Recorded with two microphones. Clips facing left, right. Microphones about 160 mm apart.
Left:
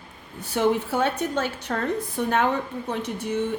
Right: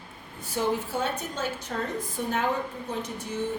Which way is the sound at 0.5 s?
65° left (ahead or behind).